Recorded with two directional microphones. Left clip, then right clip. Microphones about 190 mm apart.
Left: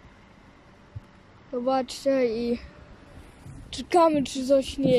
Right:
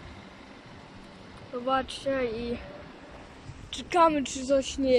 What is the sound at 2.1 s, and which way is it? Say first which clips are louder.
Speech: left 7 dB; 20° left (ahead or behind).